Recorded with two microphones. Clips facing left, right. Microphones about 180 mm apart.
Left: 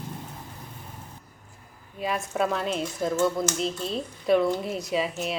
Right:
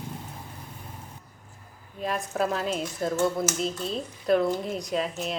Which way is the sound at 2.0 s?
5° left (ahead or behind).